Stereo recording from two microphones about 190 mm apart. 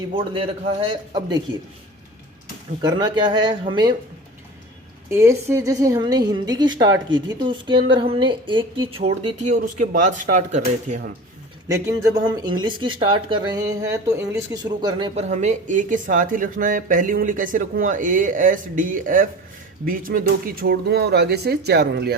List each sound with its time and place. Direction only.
0.1 s a woman's voice: 30° right (ahead or behind)
2.8 s a woman's voice: 25° right (ahead or behind)
5.1 s a woman's voice: 15° right (ahead or behind); by 11.0 s 40° right (ahead or behind)
11.7 s speech: 20° right (ahead or behind); by 22.1 s 55° right (ahead or behind)